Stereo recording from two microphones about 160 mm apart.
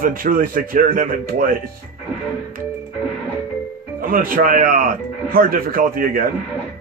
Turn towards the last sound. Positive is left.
turn(degrees=-60)  # may be behind; listen again after turning